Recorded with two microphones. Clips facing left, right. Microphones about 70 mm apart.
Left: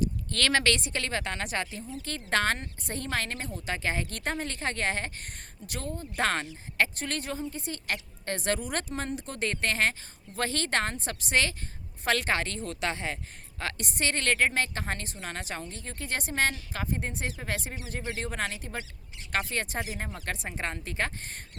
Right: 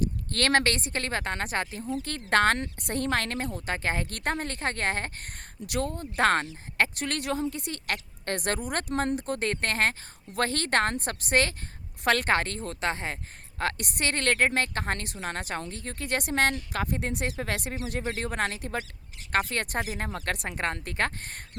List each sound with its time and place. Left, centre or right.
0.0 s speech: right
5.6 s speech: right
6.1 s speech: right
13.6 s speech: right